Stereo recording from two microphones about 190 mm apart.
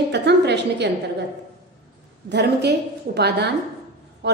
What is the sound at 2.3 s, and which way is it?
A woman's voice, 60° right (ahead or behind).